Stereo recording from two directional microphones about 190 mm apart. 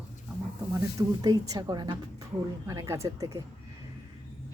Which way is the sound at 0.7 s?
20° right (ahead or behind).